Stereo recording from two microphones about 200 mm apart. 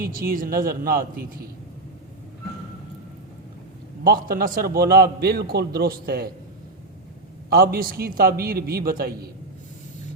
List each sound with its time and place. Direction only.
0.0 s a man's voice: 45° right (ahead or behind)
4.0 s a man's voice: 45° right (ahead or behind)
7.5 s a man's voice: 50° right (ahead or behind)